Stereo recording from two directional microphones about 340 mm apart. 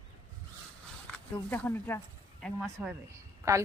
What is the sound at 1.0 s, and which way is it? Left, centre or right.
Speech, centre.